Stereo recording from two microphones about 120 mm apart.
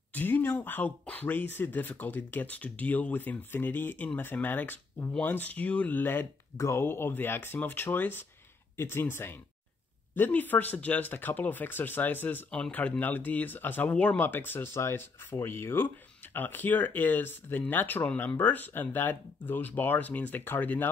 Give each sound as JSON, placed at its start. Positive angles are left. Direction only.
{"t": 0.1, "sound": "speech", "side_deg": 15}